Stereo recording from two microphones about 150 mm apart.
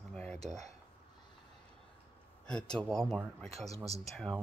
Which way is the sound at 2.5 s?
5° left (ahead or behind).